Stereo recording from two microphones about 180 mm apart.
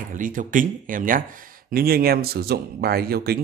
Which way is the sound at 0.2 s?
45° right (ahead or behind).